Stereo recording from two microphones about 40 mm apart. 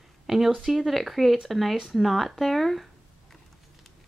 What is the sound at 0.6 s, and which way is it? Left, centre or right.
Speech, centre.